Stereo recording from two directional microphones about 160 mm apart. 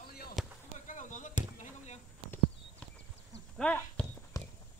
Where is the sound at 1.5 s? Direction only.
50° left (ahead or behind).